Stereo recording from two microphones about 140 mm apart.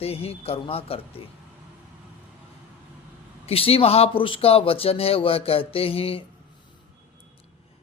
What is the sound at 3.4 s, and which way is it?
Speech, 45° left (ahead or behind).